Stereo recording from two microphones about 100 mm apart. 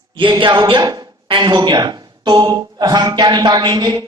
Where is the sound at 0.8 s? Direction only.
40° right (ahead or behind).